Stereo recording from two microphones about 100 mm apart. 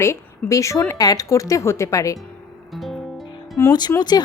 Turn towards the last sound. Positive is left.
turn(degrees=45)  # may be behind; listen again after turning